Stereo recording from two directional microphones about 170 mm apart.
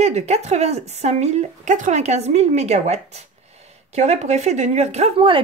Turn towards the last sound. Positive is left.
turn(degrees=-30)  # may be behind; listen again after turning